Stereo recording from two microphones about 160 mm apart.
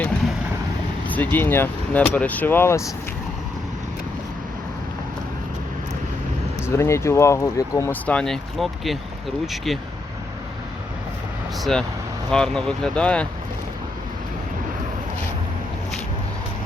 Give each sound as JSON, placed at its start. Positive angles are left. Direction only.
{"t": 1.0, "sound": "speech", "side_deg": 10}
{"t": 6.7, "sound": "speech", "side_deg": 15}
{"t": 11.6, "sound": "speech", "side_deg": 5}